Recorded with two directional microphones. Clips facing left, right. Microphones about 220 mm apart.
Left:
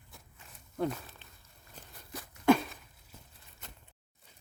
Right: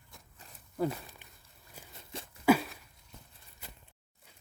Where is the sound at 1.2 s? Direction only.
15° right (ahead or behind).